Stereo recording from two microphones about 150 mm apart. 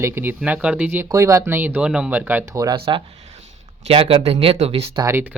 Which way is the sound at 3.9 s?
40° right (ahead or behind).